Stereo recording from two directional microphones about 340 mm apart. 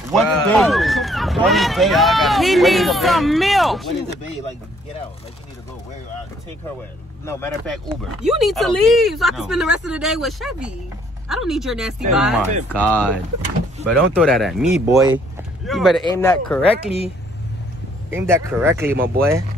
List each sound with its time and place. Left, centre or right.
0.1 s speech: centre
7.2 s speech: centre
16.6 s speech: centre
18.1 s speech: centre